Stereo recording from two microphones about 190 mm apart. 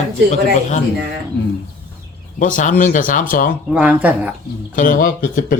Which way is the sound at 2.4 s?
40° left (ahead or behind).